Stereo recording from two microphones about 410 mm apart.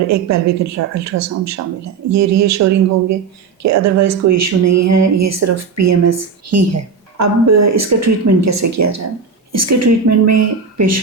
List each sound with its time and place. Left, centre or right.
0.1 s speech: right